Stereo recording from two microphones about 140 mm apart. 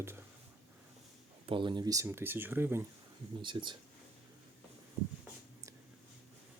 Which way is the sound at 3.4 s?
35° right (ahead or behind).